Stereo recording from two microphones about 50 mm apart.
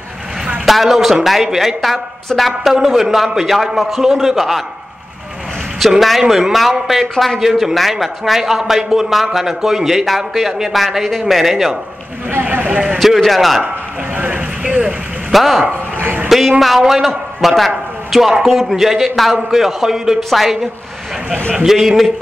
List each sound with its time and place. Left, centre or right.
0.7 s a man's voice: centre
5.8 s a man's voice: centre
14.1 s vehicle: right
15.3 s a man's voice: centre
16.0 s a sound: right
16.3 s a man's voice: centre
21.6 s a man's voice: centre